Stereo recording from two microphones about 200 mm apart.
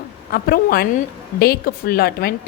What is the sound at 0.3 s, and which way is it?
A woman's voice, 50° left (ahead or behind).